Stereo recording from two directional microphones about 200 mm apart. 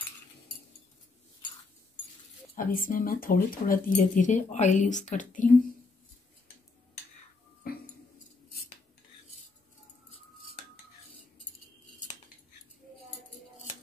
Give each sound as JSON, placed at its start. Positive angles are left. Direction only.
{"t": 2.5, "sound": "speech", "side_deg": 45}
{"t": 7.7, "sound": "dog", "side_deg": 50}